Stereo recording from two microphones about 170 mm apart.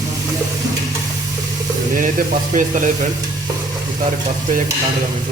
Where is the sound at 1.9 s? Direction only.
50° right (ahead or behind).